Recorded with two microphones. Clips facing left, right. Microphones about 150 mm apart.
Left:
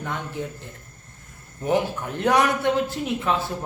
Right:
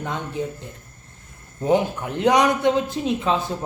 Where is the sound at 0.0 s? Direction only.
20° right (ahead or behind).